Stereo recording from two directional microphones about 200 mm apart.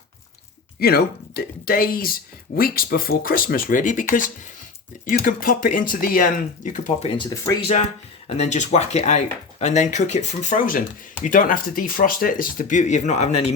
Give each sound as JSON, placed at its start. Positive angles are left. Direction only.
{"t": 0.8, "sound": "speech", "side_deg": 50}
{"t": 7.2, "sound": "speech", "side_deg": 20}
{"t": 8.4, "sound": "speech", "side_deg": 35}